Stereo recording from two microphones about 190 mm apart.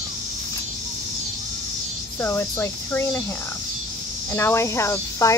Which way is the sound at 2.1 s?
10° left (ahead or behind).